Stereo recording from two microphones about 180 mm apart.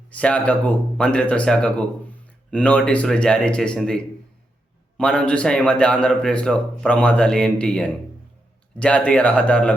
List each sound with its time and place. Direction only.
0.1 s a man's voice: 5° left (ahead or behind)